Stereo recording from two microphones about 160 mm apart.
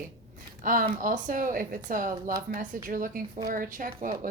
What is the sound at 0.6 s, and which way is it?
A woman's voice, 60° right (ahead or behind).